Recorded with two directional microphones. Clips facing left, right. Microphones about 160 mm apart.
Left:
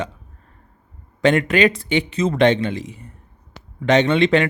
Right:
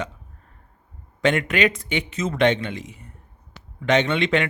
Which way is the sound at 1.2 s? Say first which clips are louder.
Left 4 dB; 35° left (ahead or behind).